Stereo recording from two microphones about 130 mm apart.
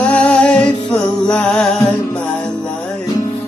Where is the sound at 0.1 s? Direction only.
10° left (ahead or behind).